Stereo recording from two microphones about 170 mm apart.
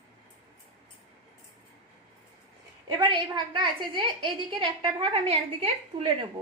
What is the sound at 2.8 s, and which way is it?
A woman's voice, 25° right (ahead or behind).